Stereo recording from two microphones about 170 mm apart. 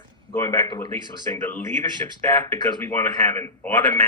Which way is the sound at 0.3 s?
15° left (ahead or behind).